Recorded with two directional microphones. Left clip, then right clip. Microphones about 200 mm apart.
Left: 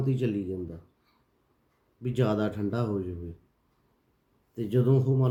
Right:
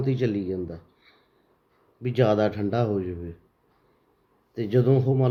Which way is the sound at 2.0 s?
20° left (ahead or behind).